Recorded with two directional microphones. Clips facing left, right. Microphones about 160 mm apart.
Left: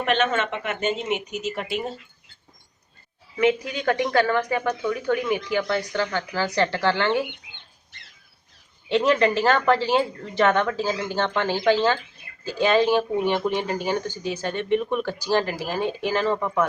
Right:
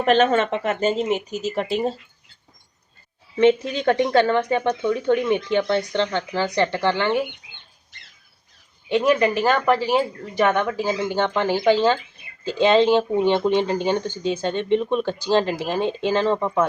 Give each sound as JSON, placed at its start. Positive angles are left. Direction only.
{"t": 0.0, "sound": "speech", "side_deg": -35}
{"t": 3.3, "sound": "speech", "side_deg": -25}
{"t": 8.9, "sound": "speech", "side_deg": -15}